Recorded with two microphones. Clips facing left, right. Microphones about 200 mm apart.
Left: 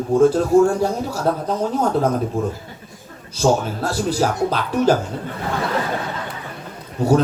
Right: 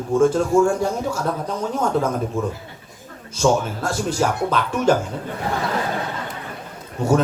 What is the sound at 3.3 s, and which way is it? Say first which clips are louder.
A man's voice: left 1 dB; 35° left (ahead or behind).